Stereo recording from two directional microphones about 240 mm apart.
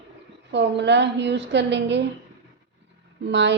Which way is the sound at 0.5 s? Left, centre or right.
Right.